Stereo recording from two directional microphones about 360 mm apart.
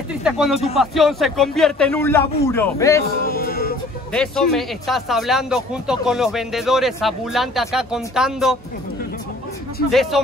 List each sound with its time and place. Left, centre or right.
0.2 s speech: centre
3.2 s choir: left
4.1 s speech: centre
9.8 s speech: centre